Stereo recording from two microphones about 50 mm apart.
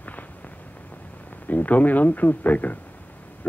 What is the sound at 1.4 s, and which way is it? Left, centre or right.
A man's voice, left.